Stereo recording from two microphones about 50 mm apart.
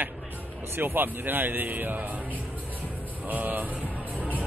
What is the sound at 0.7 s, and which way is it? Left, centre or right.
Speech, right.